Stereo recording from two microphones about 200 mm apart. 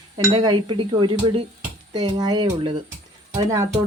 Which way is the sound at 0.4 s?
25° right (ahead or behind).